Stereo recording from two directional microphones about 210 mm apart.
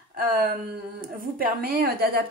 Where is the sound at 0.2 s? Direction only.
45° right (ahead or behind).